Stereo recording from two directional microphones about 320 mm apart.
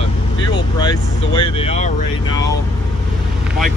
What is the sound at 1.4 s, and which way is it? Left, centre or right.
Speech, centre.